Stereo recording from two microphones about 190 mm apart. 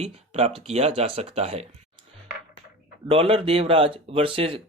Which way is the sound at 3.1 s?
30° right (ahead or behind).